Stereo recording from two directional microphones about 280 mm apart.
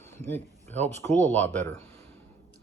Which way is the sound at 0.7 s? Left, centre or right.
Right.